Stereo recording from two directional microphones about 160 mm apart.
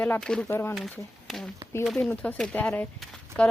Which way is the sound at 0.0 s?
5° left (ahead or behind).